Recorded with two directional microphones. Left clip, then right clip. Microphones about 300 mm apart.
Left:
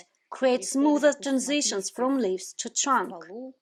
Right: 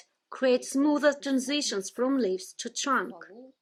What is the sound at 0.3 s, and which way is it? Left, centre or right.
Speech, centre.